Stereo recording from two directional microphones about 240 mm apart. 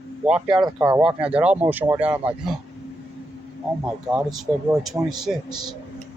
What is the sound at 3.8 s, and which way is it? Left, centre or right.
Speech, centre.